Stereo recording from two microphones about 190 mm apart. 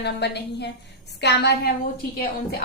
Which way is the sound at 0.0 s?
60° left (ahead or behind).